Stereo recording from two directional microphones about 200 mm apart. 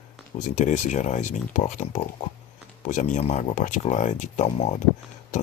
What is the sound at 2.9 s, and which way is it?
Speech, 35° left (ahead or behind).